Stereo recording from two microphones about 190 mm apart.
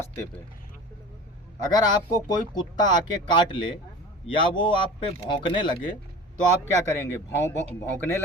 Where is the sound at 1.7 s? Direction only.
20° left (ahead or behind).